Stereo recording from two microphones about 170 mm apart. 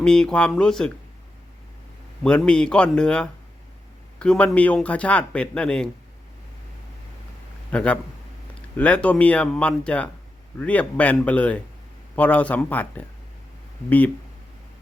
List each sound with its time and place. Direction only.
0.0 s speech: 5° left (ahead or behind)
2.2 s speech: 5° left (ahead or behind)
7.7 s speech: 5° left (ahead or behind)